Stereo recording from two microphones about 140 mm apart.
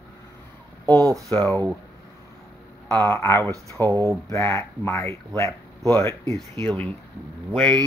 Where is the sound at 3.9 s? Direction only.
25° right (ahead or behind).